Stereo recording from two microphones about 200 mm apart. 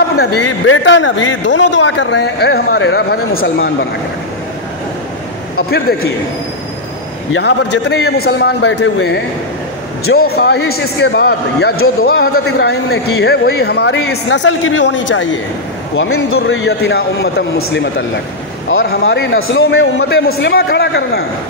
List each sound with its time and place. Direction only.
0.7 s a man's voice: 65° left (ahead or behind); by 3.7 s 50° left (ahead or behind)
5.6 s a man's voice: 50° left (ahead or behind)
7.3 s a man's voice: 55° left (ahead or behind)
11.7 s a man's voice: 90° left
12.1 s a man's voice: 50° left (ahead or behind); by 15.2 s 65° left (ahead or behind)
16.3 s a man's voice: 55° left (ahead or behind)
18.7 s a man's voice: 80° left
19.7 s a man's voice: 55° left (ahead or behind)